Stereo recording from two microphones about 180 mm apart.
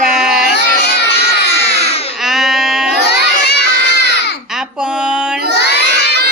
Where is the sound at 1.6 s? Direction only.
35° left (ahead or behind).